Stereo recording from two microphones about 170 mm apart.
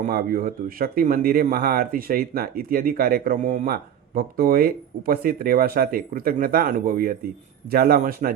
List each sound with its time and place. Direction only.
0.1 s speech: 60° right (ahead or behind); by 3.7 s 45° right (ahead or behind)
3.7 s speech: 60° right (ahead or behind)